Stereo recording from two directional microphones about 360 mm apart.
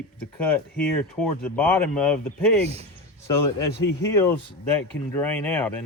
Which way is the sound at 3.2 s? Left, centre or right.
Centre.